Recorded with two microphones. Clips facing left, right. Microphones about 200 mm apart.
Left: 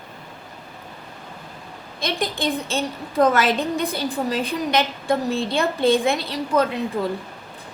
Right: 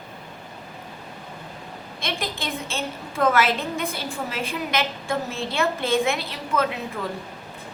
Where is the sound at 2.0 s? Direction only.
35° left (ahead or behind).